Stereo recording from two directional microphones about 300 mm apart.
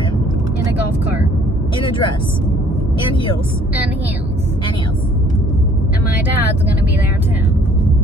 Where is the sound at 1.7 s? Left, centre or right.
Centre.